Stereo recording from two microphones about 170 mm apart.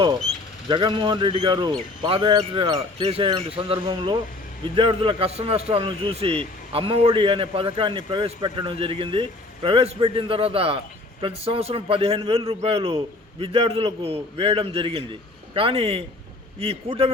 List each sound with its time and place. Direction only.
0.7 s a man's voice: 30° right (ahead or behind)